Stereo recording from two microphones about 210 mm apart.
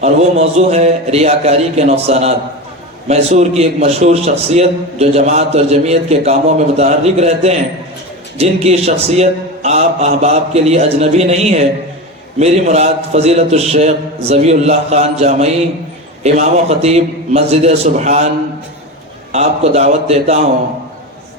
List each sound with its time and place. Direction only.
0.0 s a man's voice: 30° right (ahead or behind)
19.3 s a man's voice: 30° right (ahead or behind)